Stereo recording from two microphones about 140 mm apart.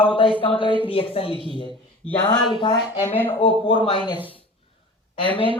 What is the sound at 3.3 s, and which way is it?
Speech, 40° left (ahead or behind).